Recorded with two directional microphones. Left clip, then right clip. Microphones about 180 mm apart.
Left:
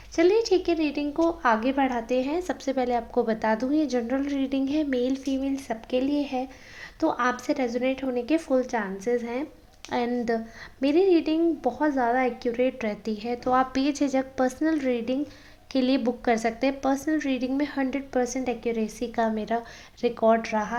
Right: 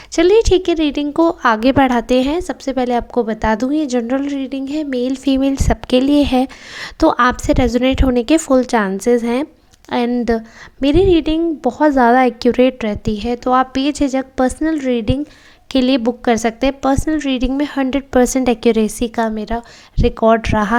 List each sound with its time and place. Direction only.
0.2 s a woman's voice: 35° right (ahead or behind)
5.2 s a woman's voice: 45° right (ahead or behind)
9.9 s a woman's voice: 30° right (ahead or behind); by 12.7 s 45° right (ahead or behind)
12.8 s a woman's voice: 35° right (ahead or behind)